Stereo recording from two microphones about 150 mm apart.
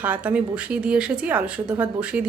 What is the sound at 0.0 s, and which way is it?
A woman's voice, 10° right (ahead or behind).